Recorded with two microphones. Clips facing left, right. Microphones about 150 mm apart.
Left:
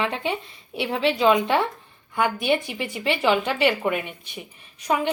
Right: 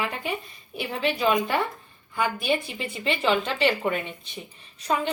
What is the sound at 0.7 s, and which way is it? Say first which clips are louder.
Speech: left 4 dB; 85° left.